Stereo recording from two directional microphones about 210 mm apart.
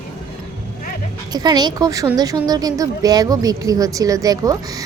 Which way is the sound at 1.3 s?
20° right (ahead or behind).